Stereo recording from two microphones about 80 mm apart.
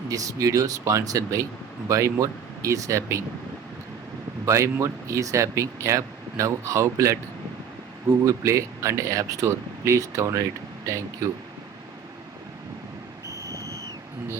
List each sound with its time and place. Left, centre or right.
0.1 s speech: right
4.4 s speech: right
8.2 s speech: right
13.2 s vehicle: left